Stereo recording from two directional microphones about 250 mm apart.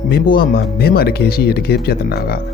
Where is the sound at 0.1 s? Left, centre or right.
Left.